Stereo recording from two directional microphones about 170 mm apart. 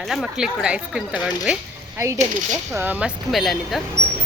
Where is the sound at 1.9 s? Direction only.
15° right (ahead or behind); by 3.8 s centre (ahead or behind).